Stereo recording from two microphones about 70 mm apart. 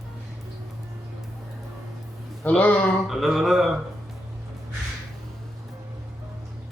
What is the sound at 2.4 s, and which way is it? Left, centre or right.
Speech, left.